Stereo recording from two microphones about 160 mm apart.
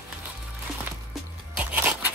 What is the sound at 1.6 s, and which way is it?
Music, 10° right (ahead or behind).